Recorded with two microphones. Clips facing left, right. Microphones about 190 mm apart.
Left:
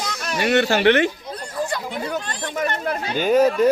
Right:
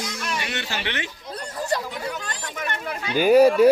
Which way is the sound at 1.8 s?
35° left (ahead or behind).